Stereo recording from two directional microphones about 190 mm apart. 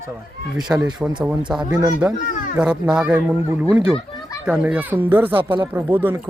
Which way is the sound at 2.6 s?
5° right (ahead or behind).